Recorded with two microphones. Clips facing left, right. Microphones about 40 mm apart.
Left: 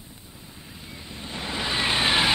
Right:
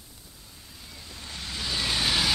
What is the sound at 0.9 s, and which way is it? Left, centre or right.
Vehicle, left.